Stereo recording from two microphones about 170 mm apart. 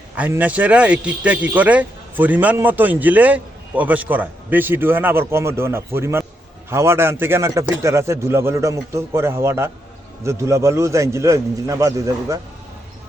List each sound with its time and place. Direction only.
0.2 s a man's voice: 10° right (ahead or behind)